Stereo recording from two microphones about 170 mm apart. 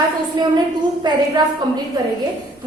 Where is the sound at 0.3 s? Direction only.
25° right (ahead or behind).